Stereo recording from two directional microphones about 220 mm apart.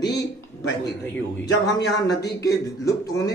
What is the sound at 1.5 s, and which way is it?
Speech, 50° left (ahead or behind).